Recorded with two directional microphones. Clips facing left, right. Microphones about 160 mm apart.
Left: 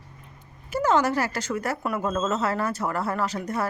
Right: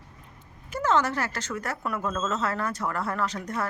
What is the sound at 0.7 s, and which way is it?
A woman's voice, 10° left (ahead or behind).